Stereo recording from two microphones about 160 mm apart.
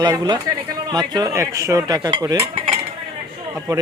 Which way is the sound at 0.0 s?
25° right (ahead or behind).